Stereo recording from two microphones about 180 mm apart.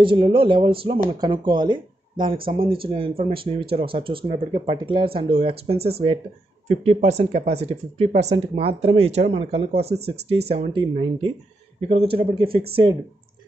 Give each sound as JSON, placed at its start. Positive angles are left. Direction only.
{"t": 0.0, "sound": "speech", "side_deg": -30}